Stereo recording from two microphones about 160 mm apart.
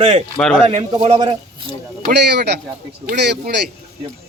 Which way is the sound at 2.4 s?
90° right.